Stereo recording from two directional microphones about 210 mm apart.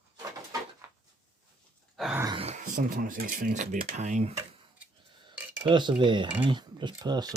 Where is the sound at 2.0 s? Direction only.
5° right (ahead or behind).